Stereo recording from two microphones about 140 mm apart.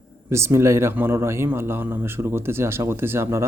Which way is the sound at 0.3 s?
20° right (ahead or behind).